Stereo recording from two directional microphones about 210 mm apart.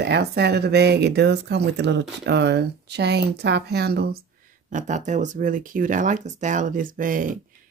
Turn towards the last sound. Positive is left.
turn(degrees=-40)  # may be behind; listen again after turning